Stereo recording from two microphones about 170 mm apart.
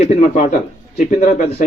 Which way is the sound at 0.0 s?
45° left (ahead or behind).